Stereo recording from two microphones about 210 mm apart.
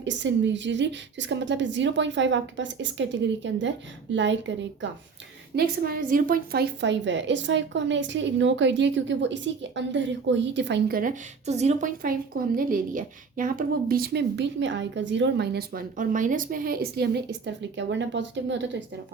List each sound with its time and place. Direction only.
0.0 s a woman's voice: 60° right (ahead or behind)
5.5 s a woman's voice: 45° right (ahead or behind)